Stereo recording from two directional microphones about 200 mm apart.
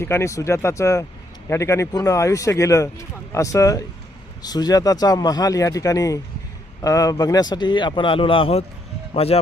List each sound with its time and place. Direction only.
0.0 s a man's voice: 15° left (ahead or behind); by 9.4 s 30° left (ahead or behind)